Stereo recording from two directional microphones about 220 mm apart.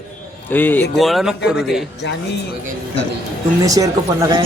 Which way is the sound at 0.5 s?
10° left (ahead or behind).